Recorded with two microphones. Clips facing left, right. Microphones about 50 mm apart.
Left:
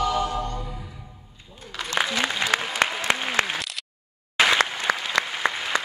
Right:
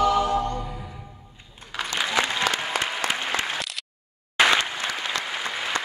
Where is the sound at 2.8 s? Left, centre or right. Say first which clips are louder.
Left 3 dB; left.